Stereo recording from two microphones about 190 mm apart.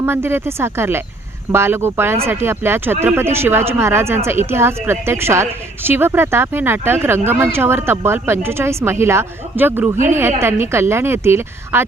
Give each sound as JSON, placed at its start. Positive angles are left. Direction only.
{"t": 0.0, "sound": "speech", "side_deg": -10}